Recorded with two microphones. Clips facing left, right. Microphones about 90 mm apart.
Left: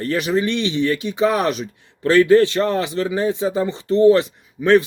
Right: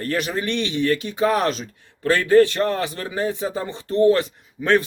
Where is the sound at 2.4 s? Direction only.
20° left (ahead or behind).